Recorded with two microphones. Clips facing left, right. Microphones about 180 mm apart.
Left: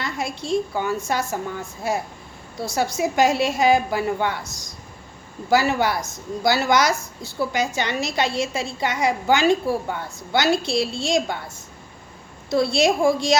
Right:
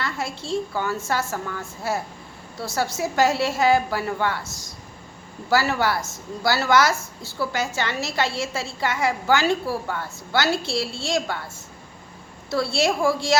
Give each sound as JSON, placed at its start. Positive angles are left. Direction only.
{"t": 0.0, "sound": "a woman's voice", "side_deg": 15}
{"t": 12.5, "sound": "a woman's voice", "side_deg": 20}